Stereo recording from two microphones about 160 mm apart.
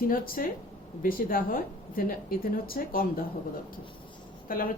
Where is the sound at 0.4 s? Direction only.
60° left (ahead or behind).